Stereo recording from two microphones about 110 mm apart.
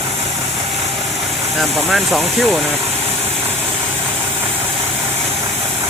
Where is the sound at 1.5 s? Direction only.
Centre (ahead or behind).